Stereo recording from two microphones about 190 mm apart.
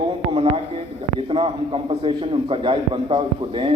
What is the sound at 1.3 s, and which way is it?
A man's voice, 30° right (ahead or behind).